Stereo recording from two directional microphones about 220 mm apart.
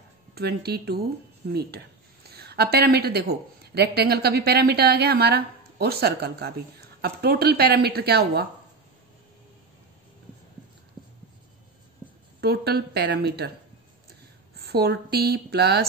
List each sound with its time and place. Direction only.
0.3 s speech: 45° right (ahead or behind)
12.4 s speech: 45° right (ahead or behind)
14.6 s speech: 45° right (ahead or behind)